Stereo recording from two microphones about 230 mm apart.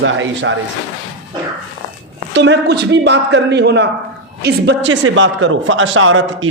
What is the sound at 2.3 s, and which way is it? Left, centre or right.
A man's voice, right.